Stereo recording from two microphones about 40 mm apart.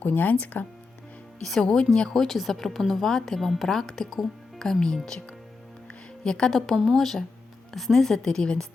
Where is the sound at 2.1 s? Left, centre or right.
Centre.